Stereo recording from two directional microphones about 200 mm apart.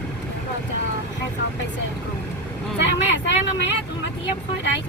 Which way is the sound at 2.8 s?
65° left (ahead or behind).